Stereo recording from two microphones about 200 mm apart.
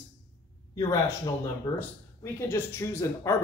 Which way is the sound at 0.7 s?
20° left (ahead or behind).